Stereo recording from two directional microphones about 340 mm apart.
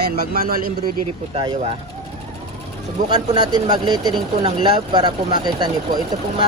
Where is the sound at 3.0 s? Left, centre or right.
Centre.